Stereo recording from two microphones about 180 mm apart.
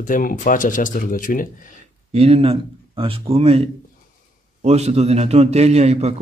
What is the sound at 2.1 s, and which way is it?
A man's voice, 35° right (ahead or behind).